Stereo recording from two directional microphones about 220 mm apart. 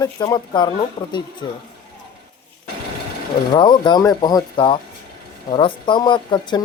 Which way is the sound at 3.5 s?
20° left (ahead or behind).